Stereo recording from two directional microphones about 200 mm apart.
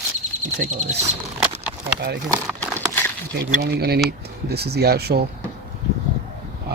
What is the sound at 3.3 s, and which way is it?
Speech, 55° right (ahead or behind).